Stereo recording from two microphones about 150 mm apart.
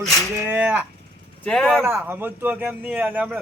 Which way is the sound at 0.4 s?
10° right (ahead or behind).